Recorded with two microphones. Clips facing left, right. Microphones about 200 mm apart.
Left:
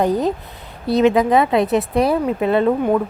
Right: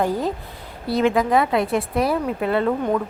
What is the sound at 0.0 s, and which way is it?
A woman's voice, 20° left (ahead or behind).